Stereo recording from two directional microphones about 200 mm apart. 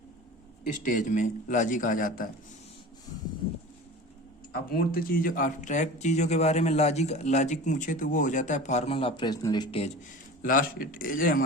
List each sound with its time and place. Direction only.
0.8 s speech: 40° left (ahead or behind)
4.5 s speech: 45° left (ahead or behind); by 9.9 s 25° left (ahead or behind)
10.4 s a man's voice: 45° left (ahead or behind)